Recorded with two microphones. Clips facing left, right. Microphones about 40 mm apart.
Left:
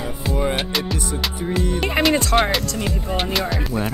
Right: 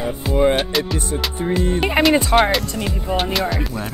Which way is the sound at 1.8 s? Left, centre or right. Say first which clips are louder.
Right 3 dB; centre.